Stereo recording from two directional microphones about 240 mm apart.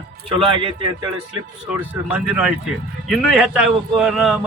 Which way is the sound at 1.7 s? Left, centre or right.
Centre.